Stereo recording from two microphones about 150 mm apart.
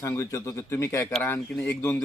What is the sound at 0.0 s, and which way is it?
A man's voice, 20° left (ahead or behind).